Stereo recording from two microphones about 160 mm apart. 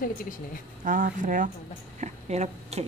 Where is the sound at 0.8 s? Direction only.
60° right (ahead or behind).